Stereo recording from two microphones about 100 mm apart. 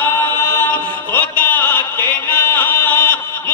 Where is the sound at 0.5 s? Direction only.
20° left (ahead or behind).